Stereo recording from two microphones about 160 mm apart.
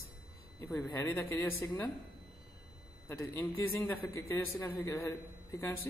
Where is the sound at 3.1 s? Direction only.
15° left (ahead or behind).